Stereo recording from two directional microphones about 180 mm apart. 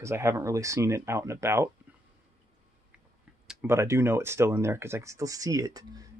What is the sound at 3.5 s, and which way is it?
Speech, 10° right (ahead or behind).